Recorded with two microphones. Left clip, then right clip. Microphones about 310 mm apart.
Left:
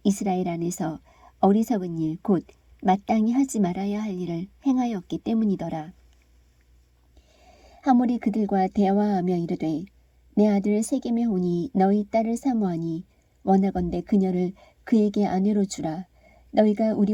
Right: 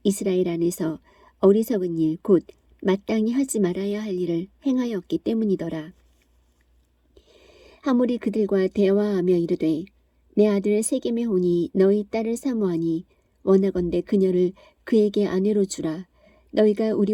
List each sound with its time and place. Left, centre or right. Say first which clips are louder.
0.0 s a woman's voice: right 3 dB; centre
7.4 s a woman's voice: left 4 dB; centre